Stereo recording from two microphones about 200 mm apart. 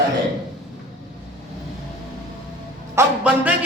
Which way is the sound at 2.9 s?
5° right (ahead or behind).